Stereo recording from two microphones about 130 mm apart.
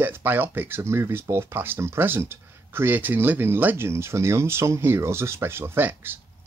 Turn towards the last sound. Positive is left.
turn(degrees=-15)  # may be behind; listen again after turning